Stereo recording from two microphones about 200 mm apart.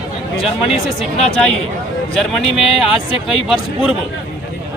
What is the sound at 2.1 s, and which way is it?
Speech, centre (ahead or behind).